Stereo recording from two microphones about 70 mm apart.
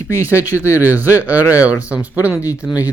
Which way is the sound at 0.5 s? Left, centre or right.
Left.